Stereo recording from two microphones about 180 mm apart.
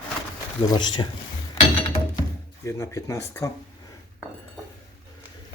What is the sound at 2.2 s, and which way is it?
Speech, 15° left (ahead or behind).